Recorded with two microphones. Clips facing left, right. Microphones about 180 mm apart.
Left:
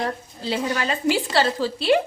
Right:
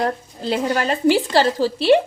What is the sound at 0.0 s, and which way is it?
A woman's voice, 45° right (ahead or behind).